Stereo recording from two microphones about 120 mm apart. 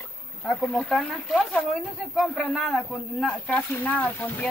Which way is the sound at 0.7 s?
5° left (ahead or behind).